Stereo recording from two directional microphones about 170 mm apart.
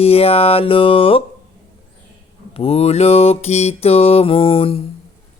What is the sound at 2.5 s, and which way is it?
Mantra, 35° left (ahead or behind).